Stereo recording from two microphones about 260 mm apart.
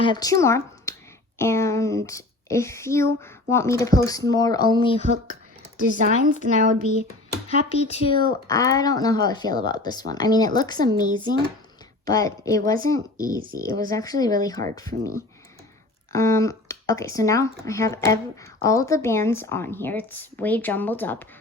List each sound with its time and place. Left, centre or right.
0.0 s speech: centre
5.8 s a woman's voice: right
7.9 s speech: centre
12.0 s speech: centre